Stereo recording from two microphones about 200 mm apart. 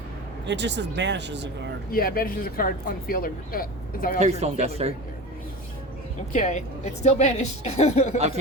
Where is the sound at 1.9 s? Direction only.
45° left (ahead or behind).